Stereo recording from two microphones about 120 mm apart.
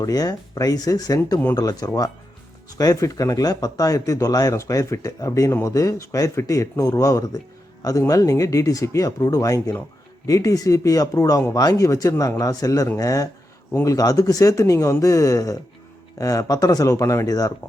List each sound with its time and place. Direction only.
0.0 s a man's voice: 30° left (ahead or behind)